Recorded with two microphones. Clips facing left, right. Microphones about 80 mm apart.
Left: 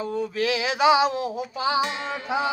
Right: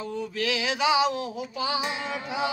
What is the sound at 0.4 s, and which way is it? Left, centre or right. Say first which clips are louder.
Music: left 4 dB; left.